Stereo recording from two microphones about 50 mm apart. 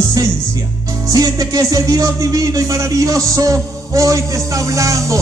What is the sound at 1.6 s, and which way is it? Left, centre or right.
A man's voice, right.